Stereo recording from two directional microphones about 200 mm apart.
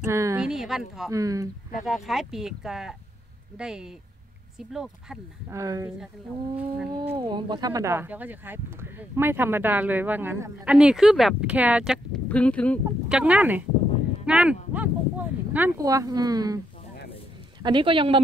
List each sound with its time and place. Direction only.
0.0 s speech: 15° right (ahead or behind)
0.5 s speech: centre (ahead or behind)
1.1 s speech: 15° right (ahead or behind)
1.9 s speech: centre (ahead or behind)
5.5 s speech: 15° right (ahead or behind)
7.2 s speech: 20° right (ahead or behind); by 12.8 s 5° left (ahead or behind)
13.1 s speech: 5° right (ahead or behind)
17.6 s speech: 25° right (ahead or behind)